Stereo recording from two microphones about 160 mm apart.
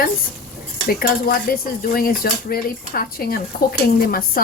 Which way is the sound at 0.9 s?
65° left (ahead or behind).